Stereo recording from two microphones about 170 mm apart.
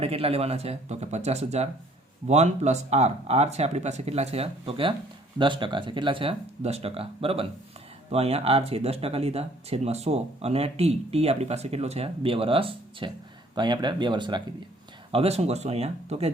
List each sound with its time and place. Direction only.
0.0 s speech: 35° right (ahead or behind)